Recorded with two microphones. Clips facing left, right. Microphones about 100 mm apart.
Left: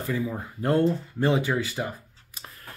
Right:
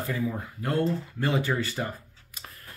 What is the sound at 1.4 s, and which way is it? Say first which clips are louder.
Speech: left 1 dB; 15° left (ahead or behind).